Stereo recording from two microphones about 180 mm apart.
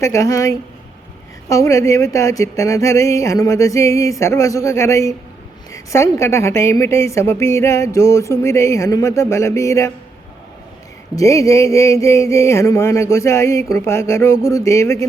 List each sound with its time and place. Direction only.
0.0 s a woman's voice: 15° left (ahead or behind)
11.1 s a woman's voice: 15° left (ahead or behind)